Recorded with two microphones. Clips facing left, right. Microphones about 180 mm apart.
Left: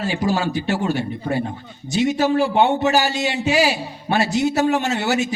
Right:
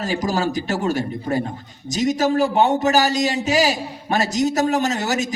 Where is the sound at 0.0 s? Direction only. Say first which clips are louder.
Even; 40° right (ahead or behind).